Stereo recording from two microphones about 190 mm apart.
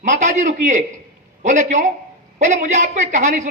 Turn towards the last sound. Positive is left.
turn(degrees=-40)  # may be behind; listen again after turning